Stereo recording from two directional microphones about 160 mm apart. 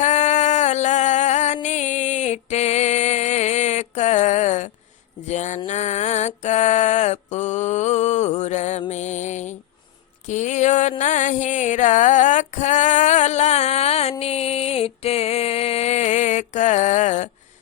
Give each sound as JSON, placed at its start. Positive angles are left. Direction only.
{"t": 0.0, "sound": "music", "side_deg": 45}
{"t": 5.2, "sound": "mantra", "side_deg": 45}
{"t": 8.9, "sound": "music", "side_deg": 45}
{"t": 10.2, "sound": "a sound", "side_deg": 50}